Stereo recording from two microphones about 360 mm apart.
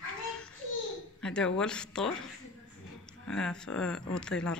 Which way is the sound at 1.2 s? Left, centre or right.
Centre.